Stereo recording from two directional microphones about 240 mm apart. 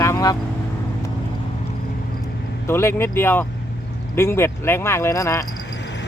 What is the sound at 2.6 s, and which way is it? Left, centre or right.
Speech, centre.